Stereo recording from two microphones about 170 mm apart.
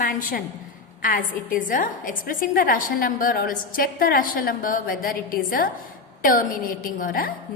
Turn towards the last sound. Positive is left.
turn(degrees=55)  # may be behind; listen again after turning